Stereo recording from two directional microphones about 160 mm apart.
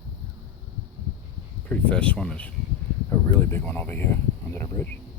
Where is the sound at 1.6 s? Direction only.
10° left (ahead or behind).